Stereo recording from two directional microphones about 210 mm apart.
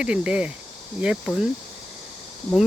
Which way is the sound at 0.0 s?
5° right (ahead or behind).